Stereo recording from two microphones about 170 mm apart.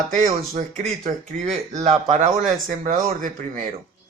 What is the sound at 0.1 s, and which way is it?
Speech, 50° right (ahead or behind).